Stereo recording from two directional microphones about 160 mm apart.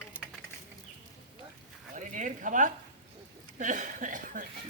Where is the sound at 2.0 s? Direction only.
50° right (ahead or behind).